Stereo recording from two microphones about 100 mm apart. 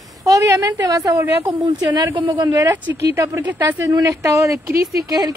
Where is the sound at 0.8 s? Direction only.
35° right (ahead or behind).